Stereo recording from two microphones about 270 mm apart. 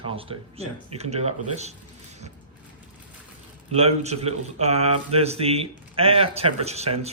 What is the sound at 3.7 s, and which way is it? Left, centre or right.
Speech, right.